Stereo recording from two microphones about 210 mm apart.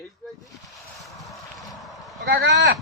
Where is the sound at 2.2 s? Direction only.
55° right (ahead or behind).